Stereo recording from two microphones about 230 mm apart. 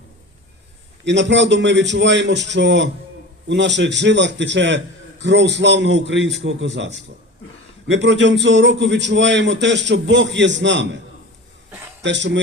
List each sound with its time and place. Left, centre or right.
1.0 s a man's voice: right
12.0 s a man's voice: right